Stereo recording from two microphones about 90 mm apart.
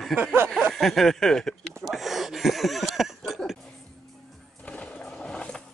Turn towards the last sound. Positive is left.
turn(degrees=10)  # may be behind; listen again after turning